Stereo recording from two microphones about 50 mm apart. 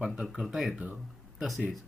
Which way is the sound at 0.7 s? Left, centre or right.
Right.